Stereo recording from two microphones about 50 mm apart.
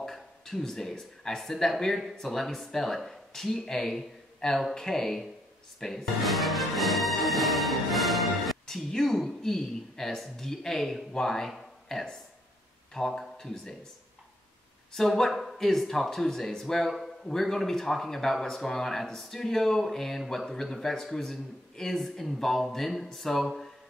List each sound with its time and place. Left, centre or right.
0.0 s speech: centre
15.0 s speech: centre